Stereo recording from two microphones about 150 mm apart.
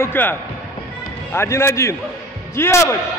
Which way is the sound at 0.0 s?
15° left (ahead or behind).